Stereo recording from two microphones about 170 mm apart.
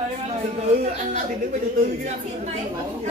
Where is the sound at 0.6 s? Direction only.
45° right (ahead or behind).